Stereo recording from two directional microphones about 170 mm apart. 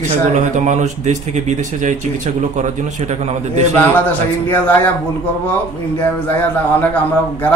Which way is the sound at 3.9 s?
10° left (ahead or behind).